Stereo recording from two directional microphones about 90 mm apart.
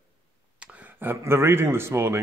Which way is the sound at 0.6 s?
20° right (ahead or behind).